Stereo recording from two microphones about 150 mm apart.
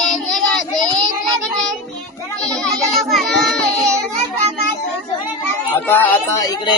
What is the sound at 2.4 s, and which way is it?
Child singing, 5° left (ahead or behind).